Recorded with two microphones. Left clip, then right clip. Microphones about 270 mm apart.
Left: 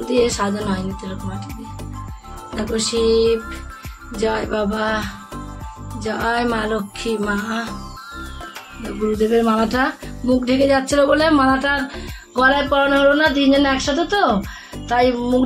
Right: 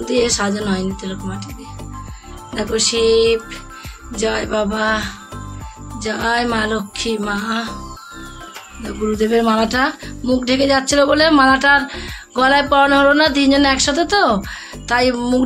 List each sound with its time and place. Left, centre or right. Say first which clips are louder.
0.0 s speech: right 1 dB; centre
2.5 s speech: right 4 dB; centre
3.1 s music: right 2 dB; centre
4.1 s speech: right 1 dB; centre
8.8 s speech: right 1 dB; centre
11.6 s music: right 7 dB; centre
12.7 s speech: right 3 dB; right
14.0 s speech: right 2 dB; centre